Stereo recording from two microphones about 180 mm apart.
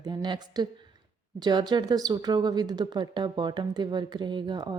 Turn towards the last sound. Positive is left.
turn(degrees=-25)  # may be behind; listen again after turning